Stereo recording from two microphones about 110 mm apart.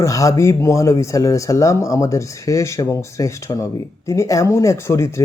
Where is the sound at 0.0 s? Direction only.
30° left (ahead or behind).